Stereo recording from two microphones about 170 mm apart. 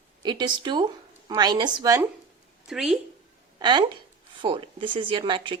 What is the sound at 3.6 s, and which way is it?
A woman's voice, 25° right (ahead or behind).